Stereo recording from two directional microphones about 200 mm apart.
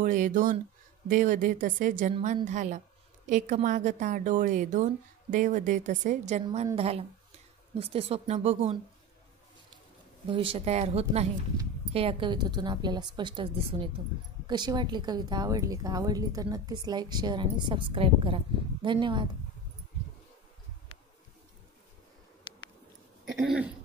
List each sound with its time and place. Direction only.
0.0 s a woman's voice: 40° right (ahead or behind)
10.2 s a woman's voice: 25° right (ahead or behind)